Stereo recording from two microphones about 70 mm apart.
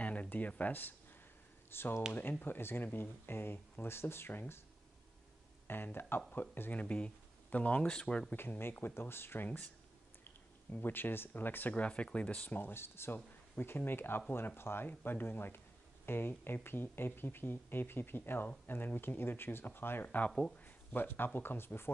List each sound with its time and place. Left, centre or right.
0.0 s speech: centre
5.7 s speech: left
8.4 s speech: left
10.7 s speech: left
20.2 s speech: centre
20.6 s speech: left